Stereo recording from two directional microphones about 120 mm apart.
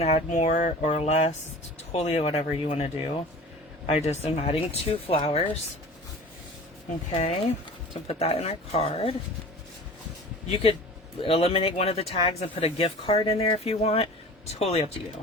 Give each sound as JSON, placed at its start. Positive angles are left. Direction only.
{"t": 0.0, "sound": "speech", "side_deg": 70}
{"t": 7.1, "sound": "speech", "side_deg": 60}
{"t": 10.5, "sound": "speech", "side_deg": 50}